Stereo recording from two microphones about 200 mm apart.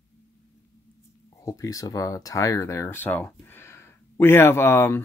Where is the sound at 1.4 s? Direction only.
15° left (ahead or behind).